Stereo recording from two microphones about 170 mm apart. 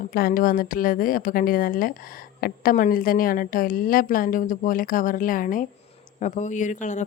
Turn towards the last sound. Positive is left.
turn(degrees=45)  # may be behind; listen again after turning